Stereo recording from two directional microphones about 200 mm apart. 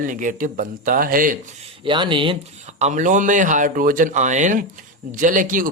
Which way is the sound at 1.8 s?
25° right (ahead or behind).